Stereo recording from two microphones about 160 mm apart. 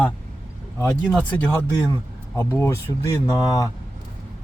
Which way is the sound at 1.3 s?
10° left (ahead or behind).